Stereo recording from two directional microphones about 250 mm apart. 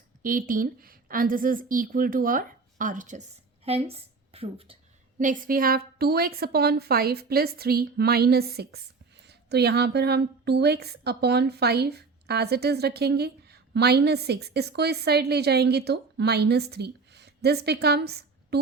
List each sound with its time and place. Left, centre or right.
0.2 s a woman's voice: right
5.2 s speech: right